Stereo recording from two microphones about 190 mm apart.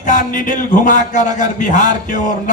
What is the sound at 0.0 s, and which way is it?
A man's voice, 45° left (ahead or behind).